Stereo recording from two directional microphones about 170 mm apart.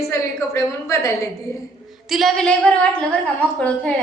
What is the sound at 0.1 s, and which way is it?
Speech, 15° left (ahead or behind).